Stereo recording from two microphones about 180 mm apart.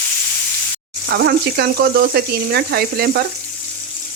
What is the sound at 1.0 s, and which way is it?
Speech, 65° right (ahead or behind).